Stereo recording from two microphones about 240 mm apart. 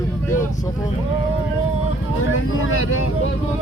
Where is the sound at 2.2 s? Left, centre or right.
Left.